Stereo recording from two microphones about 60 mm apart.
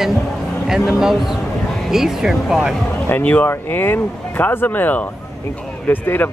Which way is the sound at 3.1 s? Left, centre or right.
Left.